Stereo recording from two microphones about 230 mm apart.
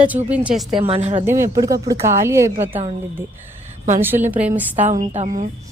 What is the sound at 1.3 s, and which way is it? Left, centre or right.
Speech, centre.